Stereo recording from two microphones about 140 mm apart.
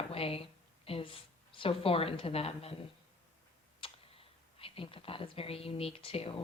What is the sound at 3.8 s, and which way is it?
Speech, 40° left (ahead or behind).